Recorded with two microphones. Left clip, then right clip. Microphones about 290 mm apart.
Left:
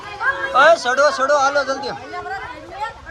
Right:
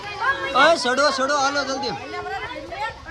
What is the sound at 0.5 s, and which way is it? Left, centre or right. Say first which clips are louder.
Speech: left 4 dB; centre.